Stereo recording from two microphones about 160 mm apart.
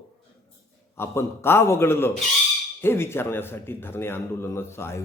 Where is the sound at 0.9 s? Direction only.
15° left (ahead or behind).